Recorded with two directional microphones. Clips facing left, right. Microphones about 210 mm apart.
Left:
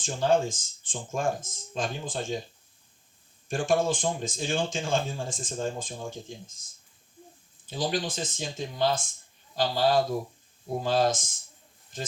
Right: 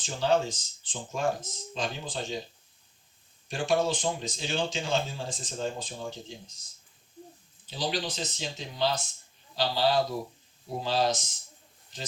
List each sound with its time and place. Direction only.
0.0 s speech: 50° left (ahead or behind)
3.5 s speech: 50° left (ahead or behind)
7.7 s speech: 50° left (ahead or behind)